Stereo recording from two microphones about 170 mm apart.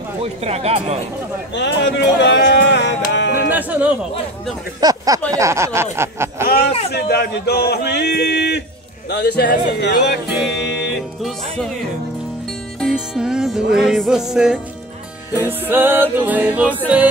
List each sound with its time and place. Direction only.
0.2 s speech: 40° right (ahead or behind)
1.5 s a sound: 90° left
3.5 s a sound: 10° right (ahead or behind)
4.7 s speech: 20° right (ahead or behind)
5.3 s music: 15° right (ahead or behind)
6.9 s speech: 70° left (ahead or behind)
7.7 s music: 80° left
9.1 s speech: 75° left (ahead or behind)
10.2 s music: centre (ahead or behind)
10.7 s music: 90° left
11.2 s music: centre (ahead or behind)
12.8 s music: 5° right (ahead or behind)